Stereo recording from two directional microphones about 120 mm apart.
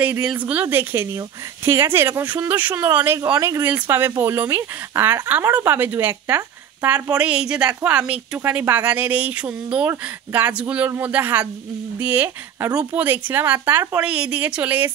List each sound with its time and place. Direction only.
0.0 s speech: 10° right (ahead or behind)
3.6 s speech: 15° right (ahead or behind)